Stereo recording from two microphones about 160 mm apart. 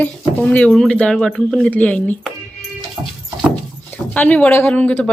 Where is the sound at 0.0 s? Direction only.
10° left (ahead or behind).